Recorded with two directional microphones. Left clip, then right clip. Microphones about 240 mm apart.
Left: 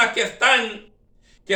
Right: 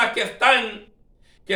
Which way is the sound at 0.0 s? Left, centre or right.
Centre.